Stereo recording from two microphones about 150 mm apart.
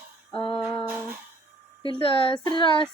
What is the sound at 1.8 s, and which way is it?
Speech, 35° left (ahead or behind).